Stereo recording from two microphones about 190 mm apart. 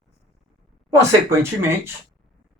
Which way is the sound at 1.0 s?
15° right (ahead or behind).